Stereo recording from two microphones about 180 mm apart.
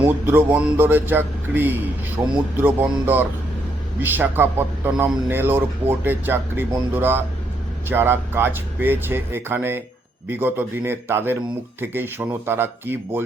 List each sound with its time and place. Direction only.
0.3 s a man's voice: 10° right (ahead or behind)